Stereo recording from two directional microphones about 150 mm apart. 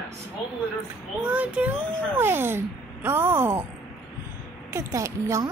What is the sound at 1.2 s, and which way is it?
A child's voice, 10° right (ahead or behind).